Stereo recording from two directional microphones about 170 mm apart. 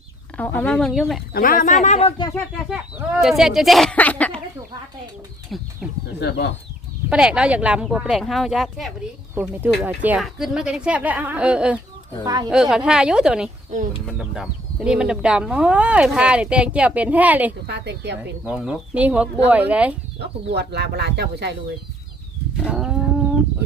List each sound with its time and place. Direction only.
0.3 s speech: 10° left (ahead or behind)
1.3 s speech: 55° left (ahead or behind); by 2.3 s 30° left (ahead or behind)
2.6 s speech: 5° right (ahead or behind); by 4.4 s 10° left (ahead or behind)
5.5 s speech: centre (ahead or behind)
6.1 s speech: 80° left
7.1 s speech: 5° right (ahead or behind)
12.2 s speech: 20° right (ahead or behind)
12.5 s speech: 5° right (ahead or behind)
17.7 s a woman's voice: 80° right
18.4 s speech: 5° right (ahead or behind)
20.1 s speech: 75° right (ahead or behind)
22.6 s livestock: 5° right (ahead or behind)